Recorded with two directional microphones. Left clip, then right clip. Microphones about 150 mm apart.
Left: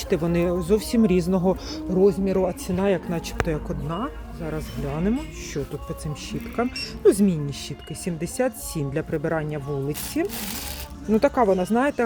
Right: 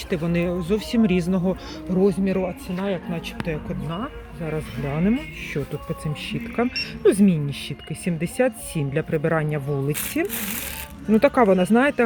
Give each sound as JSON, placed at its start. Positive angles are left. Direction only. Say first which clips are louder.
{"t": 0.1, "sound": "speech", "louder": "left 2 dB", "side_deg": 10}
{"t": 1.9, "sound": "speech", "louder": "left 1 dB", "side_deg": -5}
{"t": 2.6, "sound": "speech", "louder": "left 4 dB", "side_deg": 45}
{"t": 3.8, "sound": "speech", "louder": "left 2 dB", "side_deg": 0}
{"t": 4.4, "sound": "speech", "louder": "right 2 dB", "side_deg": -20}
{"t": 6.6, "sound": "speech", "louder": "right 1 dB", "side_deg": -15}
{"t": 11.3, "sound": "speech", "louder": "right 3 dB", "side_deg": -25}